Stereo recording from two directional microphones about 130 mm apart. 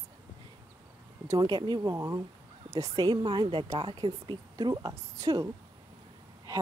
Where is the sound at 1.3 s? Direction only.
35° right (ahead or behind).